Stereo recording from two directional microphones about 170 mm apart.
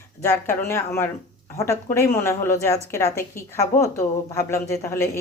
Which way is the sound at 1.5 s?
15° left (ahead or behind).